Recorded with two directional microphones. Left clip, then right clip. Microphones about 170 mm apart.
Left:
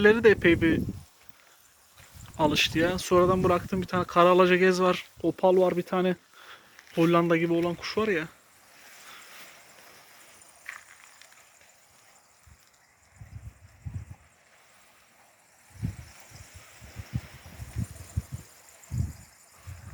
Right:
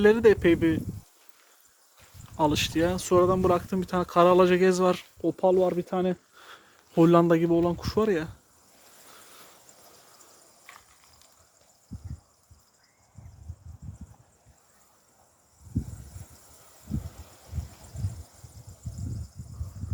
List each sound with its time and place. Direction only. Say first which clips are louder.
0.0 s speech: even; 20° right (ahead or behind)
2.4 s speech: left 1 dB; 25° right (ahead or behind)
3.5 s speech: right 1 dB; 35° right (ahead or behind)
5.2 s speech: left 1 dB; 5° right (ahead or behind)
6.5 s speech: right 4 dB; 45° right (ahead or behind)
10.7 s a sound: left 8 dB; 10° right (ahead or behind)